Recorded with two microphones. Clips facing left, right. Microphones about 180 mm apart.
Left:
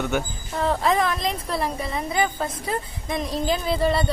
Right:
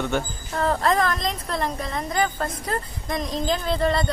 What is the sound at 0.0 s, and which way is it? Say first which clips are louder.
Speech: even; 5° left (ahead or behind).